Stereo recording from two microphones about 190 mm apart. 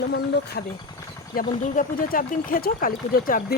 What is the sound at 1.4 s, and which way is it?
Speech, 45° left (ahead or behind).